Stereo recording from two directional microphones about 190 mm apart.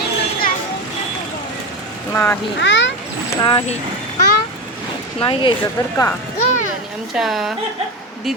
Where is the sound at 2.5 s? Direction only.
75° left (ahead or behind).